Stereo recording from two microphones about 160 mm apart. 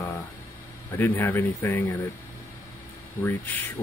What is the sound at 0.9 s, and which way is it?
Speech, 10° left (ahead or behind).